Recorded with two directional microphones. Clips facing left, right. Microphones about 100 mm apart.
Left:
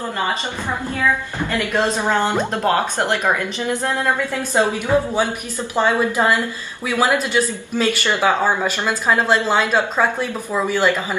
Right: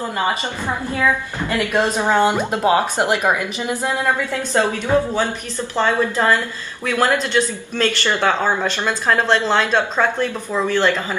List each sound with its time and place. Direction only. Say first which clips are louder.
1.5 s speech: right 1 dB; 20° right (ahead or behind)
4.3 s speech: even; 15° left (ahead or behind)